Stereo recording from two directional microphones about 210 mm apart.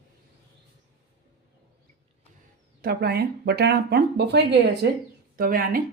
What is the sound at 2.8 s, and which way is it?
Speech, 50° right (ahead or behind).